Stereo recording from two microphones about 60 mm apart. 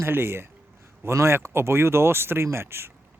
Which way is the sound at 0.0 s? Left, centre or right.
Right.